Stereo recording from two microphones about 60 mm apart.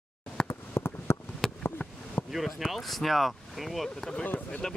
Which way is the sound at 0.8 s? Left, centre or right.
Left.